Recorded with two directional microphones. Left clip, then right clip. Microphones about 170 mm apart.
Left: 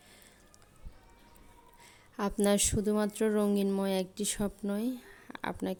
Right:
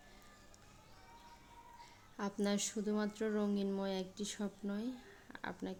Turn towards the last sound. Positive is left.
turn(degrees=35)  # may be behind; listen again after turning